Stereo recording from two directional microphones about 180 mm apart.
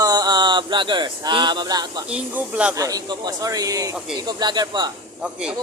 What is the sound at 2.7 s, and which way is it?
Speech, 20° right (ahead or behind).